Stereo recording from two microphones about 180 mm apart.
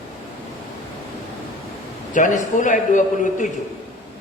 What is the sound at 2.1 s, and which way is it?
A man's voice, 45° left (ahead or behind).